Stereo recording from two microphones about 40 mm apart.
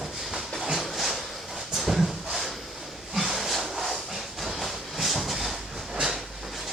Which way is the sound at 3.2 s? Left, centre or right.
Centre.